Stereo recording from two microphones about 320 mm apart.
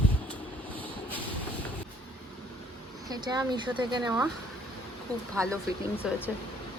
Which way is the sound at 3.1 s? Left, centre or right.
Centre.